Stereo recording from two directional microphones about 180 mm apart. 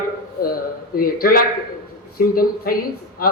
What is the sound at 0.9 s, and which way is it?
Speech, 55° left (ahead or behind).